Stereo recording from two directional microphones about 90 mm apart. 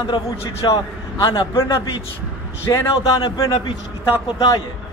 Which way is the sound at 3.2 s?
55° left (ahead or behind).